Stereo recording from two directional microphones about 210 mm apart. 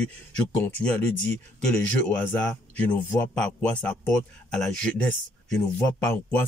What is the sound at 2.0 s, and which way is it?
Speech, 5° left (ahead or behind).